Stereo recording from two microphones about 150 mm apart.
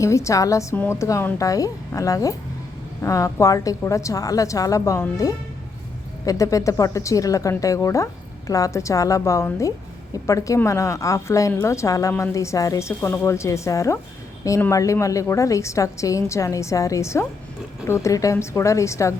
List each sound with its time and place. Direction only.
0.0 s a woman's voice: 20° left (ahead or behind)